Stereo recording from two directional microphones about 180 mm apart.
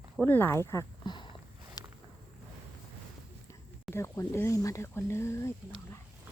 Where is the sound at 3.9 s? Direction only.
15° left (ahead or behind).